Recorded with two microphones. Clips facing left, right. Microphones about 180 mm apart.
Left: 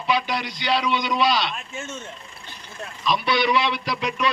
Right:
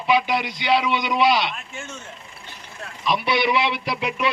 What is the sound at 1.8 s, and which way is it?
Speech, 20° left (ahead or behind).